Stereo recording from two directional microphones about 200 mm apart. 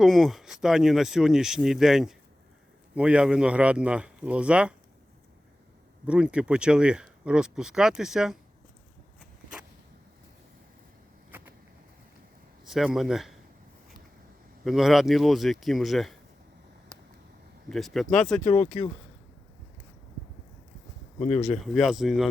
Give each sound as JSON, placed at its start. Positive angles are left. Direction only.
{"t": 0.0, "sound": "speech", "side_deg": 0}
{"t": 6.1, "sound": "speech", "side_deg": -5}
{"t": 11.3, "sound": "vehicle", "side_deg": -10}
{"t": 12.6, "sound": "a man's voice", "side_deg": 0}
{"t": 14.6, "sound": "speech", "side_deg": 0}
{"t": 17.7, "sound": "speech", "side_deg": 0}
{"t": 18.4, "sound": "speech", "side_deg": 35}
{"t": 21.2, "sound": "speech", "side_deg": 35}
{"t": 21.6, "sound": "speech", "side_deg": 0}